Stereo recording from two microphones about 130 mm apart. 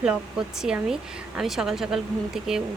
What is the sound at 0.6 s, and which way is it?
Speech, 5° right (ahead or behind).